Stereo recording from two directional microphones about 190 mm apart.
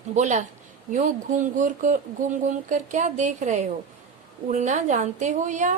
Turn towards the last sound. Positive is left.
turn(degrees=-40)  # may be behind; listen again after turning